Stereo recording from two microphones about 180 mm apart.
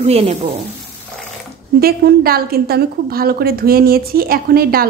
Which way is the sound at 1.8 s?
60° right (ahead or behind).